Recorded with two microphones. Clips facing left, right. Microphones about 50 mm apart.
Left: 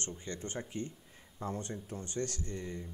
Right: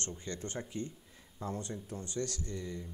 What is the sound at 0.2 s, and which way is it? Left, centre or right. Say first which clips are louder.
Speech: even; left.